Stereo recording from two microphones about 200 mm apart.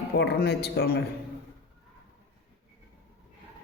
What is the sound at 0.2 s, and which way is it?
Speech, 55° left (ahead or behind).